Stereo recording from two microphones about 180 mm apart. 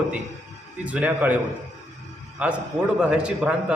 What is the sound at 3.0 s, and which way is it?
Speech, 5° right (ahead or behind).